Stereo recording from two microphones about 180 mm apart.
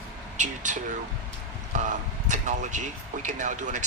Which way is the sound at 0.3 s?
40° right (ahead or behind).